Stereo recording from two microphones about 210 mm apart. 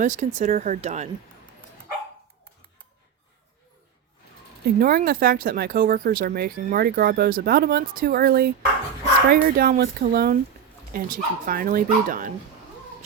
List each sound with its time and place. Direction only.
0.0 s speech: 35° right (ahead or behind)
4.6 s speech: 45° right (ahead or behind)